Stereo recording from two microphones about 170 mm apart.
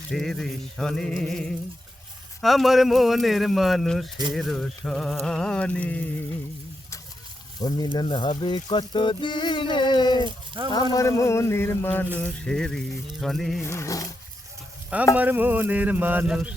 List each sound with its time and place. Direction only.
0.1 s speech: centre (ahead or behind)
7.6 s speech: 25° left (ahead or behind)
10.2 s a sound: 30° right (ahead or behind)
10.9 s speech: 20° left (ahead or behind); by 13.6 s centre (ahead or behind)
13.6 s speech: 15° left (ahead or behind)
15.1 s speech: 10° right (ahead or behind)